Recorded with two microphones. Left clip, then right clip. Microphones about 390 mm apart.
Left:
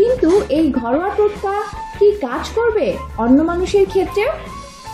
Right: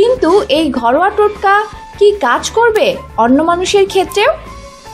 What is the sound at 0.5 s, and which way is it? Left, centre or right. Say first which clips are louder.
A woman's voice: right 5 dB; right.